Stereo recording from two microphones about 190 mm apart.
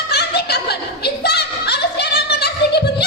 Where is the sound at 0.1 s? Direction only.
60° left (ahead or behind).